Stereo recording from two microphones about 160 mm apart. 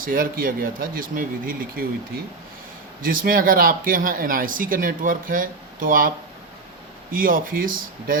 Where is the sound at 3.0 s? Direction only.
60° right (ahead or behind).